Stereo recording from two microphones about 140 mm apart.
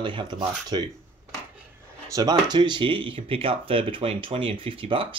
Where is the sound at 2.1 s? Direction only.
30° right (ahead or behind).